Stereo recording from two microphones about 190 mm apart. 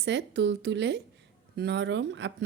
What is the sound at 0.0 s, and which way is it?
Speech, 65° right (ahead or behind).